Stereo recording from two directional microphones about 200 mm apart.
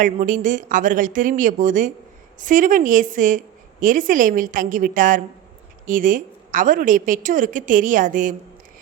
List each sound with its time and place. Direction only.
0.0 s a woman's voice: 40° right (ahead or behind)